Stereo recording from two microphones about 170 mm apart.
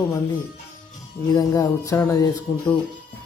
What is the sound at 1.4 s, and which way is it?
Speech, 20° left (ahead or behind).